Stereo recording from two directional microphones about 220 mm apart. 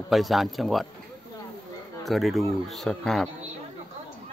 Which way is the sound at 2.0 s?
Centre (ahead or behind).